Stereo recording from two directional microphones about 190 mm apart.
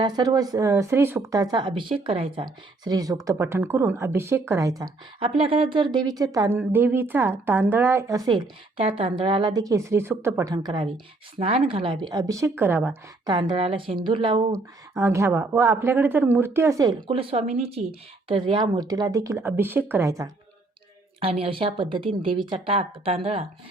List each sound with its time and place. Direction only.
0.0 s speech: 20° right (ahead or behind)
5.2 s speech: 30° right (ahead or behind); by 12.9 s 10° right (ahead or behind)
13.2 s speech: 25° right (ahead or behind)
14.5 s speech: 15° right (ahead or behind)
17.1 s speech: 30° right (ahead or behind)
21.2 s speech: 30° right (ahead or behind)